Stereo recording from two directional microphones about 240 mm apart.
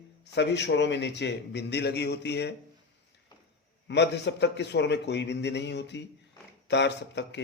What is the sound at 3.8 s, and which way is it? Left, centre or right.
A man's voice, left.